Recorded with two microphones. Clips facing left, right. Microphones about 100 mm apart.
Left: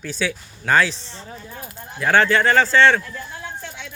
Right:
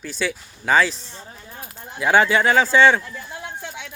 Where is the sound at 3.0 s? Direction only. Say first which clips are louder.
Left 1 dB; 15° right (ahead or behind).